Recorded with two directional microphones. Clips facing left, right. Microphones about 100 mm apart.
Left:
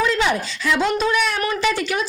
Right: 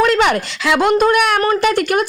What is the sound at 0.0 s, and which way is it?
A woman's voice, 70° right (ahead or behind).